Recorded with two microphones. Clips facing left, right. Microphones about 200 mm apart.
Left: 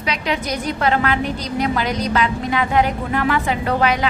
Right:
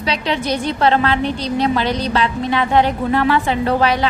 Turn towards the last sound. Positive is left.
turn(degrees=-30)  # may be behind; listen again after turning